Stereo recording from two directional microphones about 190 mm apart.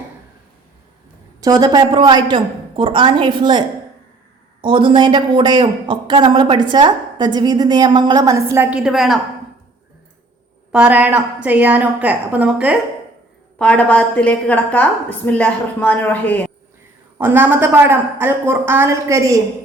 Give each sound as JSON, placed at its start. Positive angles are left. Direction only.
{"t": 1.4, "sound": "a woman's voice", "side_deg": -20}
{"t": 4.6, "sound": "a woman's voice", "side_deg": -25}
{"t": 10.7, "sound": "a woman's voice", "side_deg": -5}
{"t": 13.6, "sound": "a woman's voice", "side_deg": 5}
{"t": 17.2, "sound": "a woman's voice", "side_deg": -10}